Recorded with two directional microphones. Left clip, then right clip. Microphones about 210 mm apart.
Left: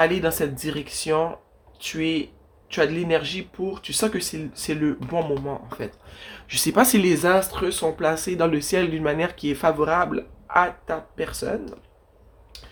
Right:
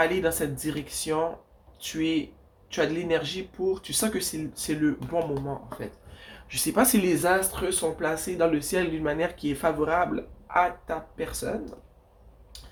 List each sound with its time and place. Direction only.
0.0 s speech: 35° left (ahead or behind)